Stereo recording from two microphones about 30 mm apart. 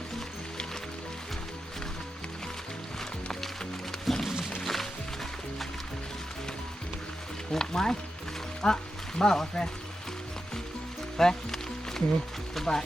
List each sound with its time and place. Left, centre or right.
4.1 s music: centre
7.5 s a sound: centre
8.6 s speech: left
11.2 s music: centre
12.6 s speech: centre